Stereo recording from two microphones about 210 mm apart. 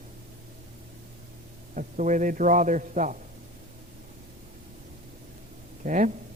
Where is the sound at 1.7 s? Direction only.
35° right (ahead or behind).